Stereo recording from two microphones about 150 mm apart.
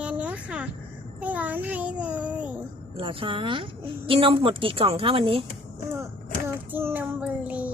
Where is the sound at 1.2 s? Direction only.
10° right (ahead or behind).